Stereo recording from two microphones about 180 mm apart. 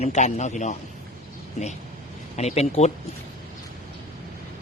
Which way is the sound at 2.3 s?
35° left (ahead or behind).